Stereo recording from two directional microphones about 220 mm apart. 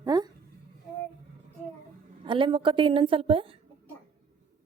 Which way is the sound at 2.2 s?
20° right (ahead or behind).